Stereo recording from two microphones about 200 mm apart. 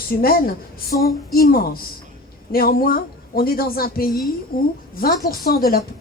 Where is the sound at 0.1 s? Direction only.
50° left (ahead or behind).